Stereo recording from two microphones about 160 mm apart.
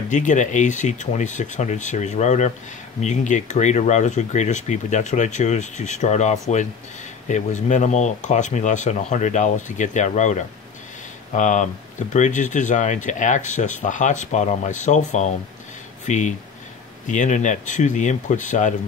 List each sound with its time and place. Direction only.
0.1 s speech: 50° left (ahead or behind)